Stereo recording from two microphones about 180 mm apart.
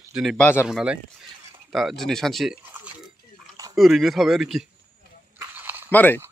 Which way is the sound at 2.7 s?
5° right (ahead or behind).